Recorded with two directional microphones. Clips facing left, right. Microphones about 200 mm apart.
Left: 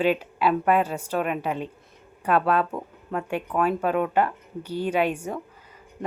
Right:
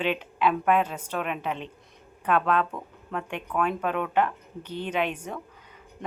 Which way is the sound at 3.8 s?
40° left (ahead or behind).